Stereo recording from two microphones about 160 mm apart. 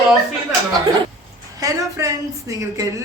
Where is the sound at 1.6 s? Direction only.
20° right (ahead or behind).